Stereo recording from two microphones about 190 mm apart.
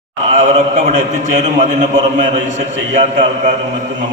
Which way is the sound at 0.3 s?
40° right (ahead or behind).